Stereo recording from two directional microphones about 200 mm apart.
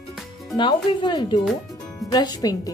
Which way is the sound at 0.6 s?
20° left (ahead or behind).